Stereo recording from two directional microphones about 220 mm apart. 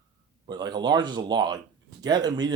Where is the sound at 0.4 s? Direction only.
20° right (ahead or behind).